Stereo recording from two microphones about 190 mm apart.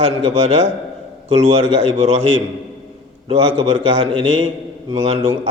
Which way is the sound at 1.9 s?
35° right (ahead or behind).